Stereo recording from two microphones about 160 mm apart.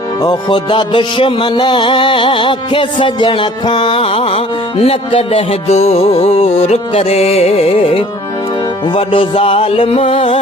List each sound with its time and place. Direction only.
0.2 s music: 25° left (ahead or behind)